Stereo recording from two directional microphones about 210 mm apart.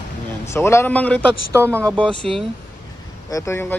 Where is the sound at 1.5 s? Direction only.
10° right (ahead or behind).